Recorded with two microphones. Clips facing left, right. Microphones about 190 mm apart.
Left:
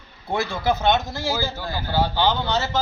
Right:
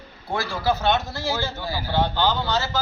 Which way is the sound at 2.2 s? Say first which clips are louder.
Left 1 dB; 20° left (ahead or behind).